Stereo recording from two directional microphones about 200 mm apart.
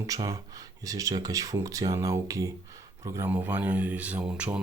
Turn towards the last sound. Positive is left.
turn(degrees=-5)  # may be behind; listen again after turning